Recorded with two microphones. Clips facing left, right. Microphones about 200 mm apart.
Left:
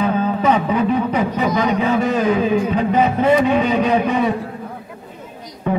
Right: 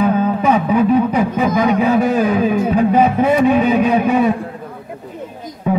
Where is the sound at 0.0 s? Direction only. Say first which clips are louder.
Right 3 dB; 10° right (ahead or behind).